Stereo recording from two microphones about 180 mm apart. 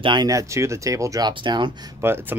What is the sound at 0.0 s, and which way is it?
Speech, 25° right (ahead or behind).